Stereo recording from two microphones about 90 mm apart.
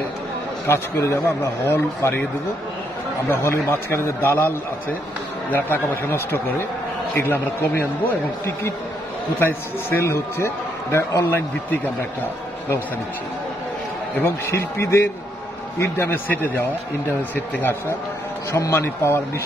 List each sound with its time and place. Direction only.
0.7 s a man's voice: 30° left (ahead or behind)
3.3 s a man's voice: 25° left (ahead or behind)
9.4 s a man's voice: 25° left (ahead or behind)
14.1 s a man's voice: 25° left (ahead or behind)